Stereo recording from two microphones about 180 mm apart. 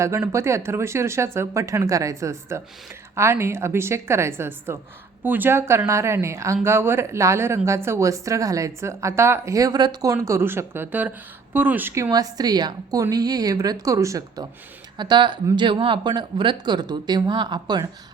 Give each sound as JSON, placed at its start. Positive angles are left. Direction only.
{"t": 0.0, "sound": "a woman's voice", "side_deg": -15}